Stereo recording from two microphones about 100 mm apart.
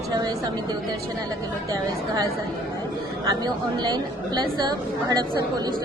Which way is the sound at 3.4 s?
45° right (ahead or behind).